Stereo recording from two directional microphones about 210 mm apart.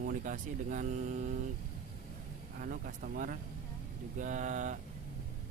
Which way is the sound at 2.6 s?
40° right (ahead or behind).